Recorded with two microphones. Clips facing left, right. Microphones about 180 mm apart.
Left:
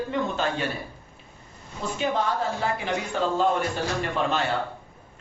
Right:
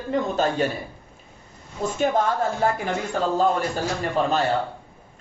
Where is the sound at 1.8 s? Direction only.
45° right (ahead or behind).